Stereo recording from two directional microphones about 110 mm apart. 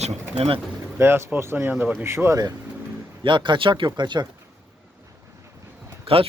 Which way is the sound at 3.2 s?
45° right (ahead or behind).